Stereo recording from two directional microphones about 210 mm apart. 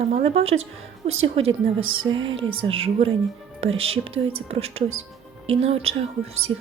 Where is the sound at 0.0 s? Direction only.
30° right (ahead or behind).